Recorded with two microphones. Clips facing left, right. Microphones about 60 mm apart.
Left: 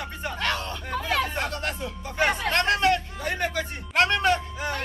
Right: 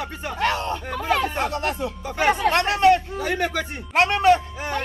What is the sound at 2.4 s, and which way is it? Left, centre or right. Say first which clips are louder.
Hubbub: right 3 dB; centre.